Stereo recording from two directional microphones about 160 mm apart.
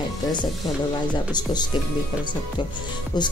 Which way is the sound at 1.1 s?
25° left (ahead or behind).